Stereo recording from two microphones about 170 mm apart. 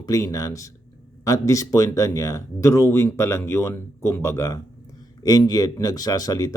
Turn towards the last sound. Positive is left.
turn(degrees=20)  # may be behind; listen again after turning